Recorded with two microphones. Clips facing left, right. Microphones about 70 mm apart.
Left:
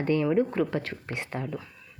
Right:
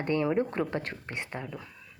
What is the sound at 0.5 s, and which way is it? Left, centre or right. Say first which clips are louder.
Speech: left 3 dB; right.